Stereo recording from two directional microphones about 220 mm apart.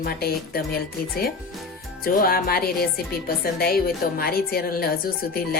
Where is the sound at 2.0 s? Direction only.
40° left (ahead or behind).